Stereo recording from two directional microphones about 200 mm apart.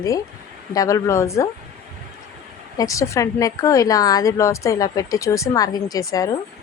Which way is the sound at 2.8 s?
15° left (ahead or behind).